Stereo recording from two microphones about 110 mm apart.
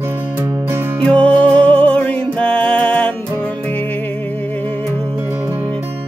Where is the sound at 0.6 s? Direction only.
20° right (ahead or behind).